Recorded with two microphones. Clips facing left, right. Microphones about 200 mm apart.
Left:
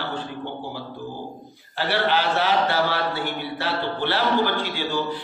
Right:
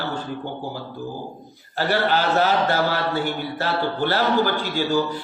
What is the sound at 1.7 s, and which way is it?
A man's voice, 45° right (ahead or behind).